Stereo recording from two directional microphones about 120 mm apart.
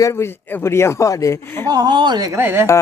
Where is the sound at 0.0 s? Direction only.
20° left (ahead or behind).